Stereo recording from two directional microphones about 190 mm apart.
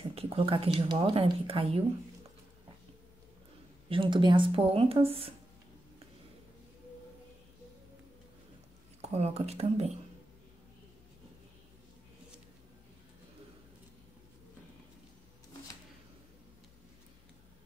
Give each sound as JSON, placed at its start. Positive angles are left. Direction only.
{"t": 0.1, "sound": "speech", "side_deg": -30}
{"t": 3.9, "sound": "speech", "side_deg": -25}
{"t": 9.0, "sound": "speech", "side_deg": -35}